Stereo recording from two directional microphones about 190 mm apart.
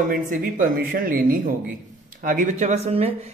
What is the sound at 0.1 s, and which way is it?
Speech, 45° right (ahead or behind).